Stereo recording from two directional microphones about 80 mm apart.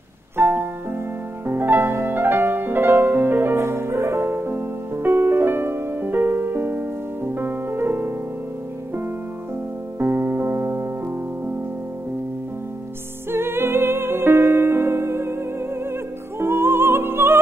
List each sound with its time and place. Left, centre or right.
0.4 s music: right
9.9 s music: right
13.3 s music: right